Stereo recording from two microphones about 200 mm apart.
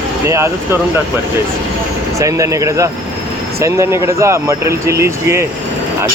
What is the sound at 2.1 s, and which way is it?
Speech, 15° right (ahead or behind).